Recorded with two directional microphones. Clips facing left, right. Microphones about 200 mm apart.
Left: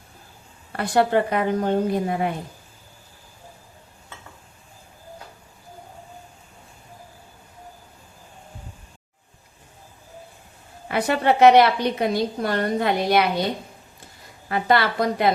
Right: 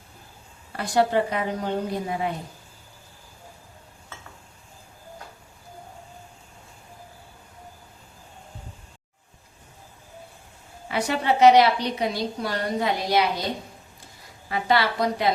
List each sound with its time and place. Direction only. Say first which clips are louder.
0.8 s a woman's voice: left 2 dB; 60° left (ahead or behind)
10.8 s a woman's voice: left 4 dB; 55° left (ahead or behind)
14.5 s a woman's voice: left 2 dB; 55° left (ahead or behind)